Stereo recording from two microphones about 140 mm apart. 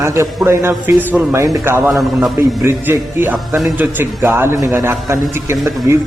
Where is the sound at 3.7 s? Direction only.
15° right (ahead or behind).